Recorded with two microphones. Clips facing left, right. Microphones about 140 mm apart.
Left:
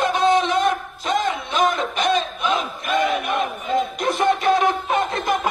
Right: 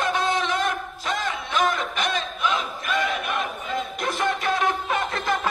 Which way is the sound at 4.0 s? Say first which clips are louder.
Left 6 dB; 25° left (ahead or behind).